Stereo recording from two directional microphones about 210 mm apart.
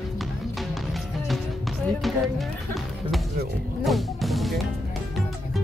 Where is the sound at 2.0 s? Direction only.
Centre (ahead or behind).